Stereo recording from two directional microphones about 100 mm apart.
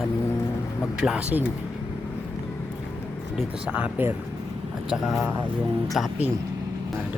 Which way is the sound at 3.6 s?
15° right (ahead or behind).